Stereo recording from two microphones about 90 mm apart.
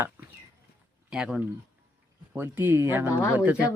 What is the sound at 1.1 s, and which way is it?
Speech, 10° right (ahead or behind).